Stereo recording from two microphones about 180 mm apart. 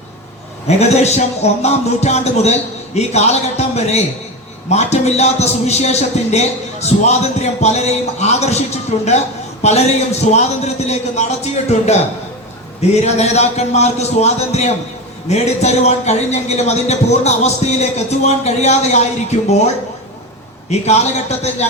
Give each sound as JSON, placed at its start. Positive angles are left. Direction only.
{"t": 0.7, "sound": "speech", "side_deg": 40}
{"t": 20.7, "sound": "speech", "side_deg": 35}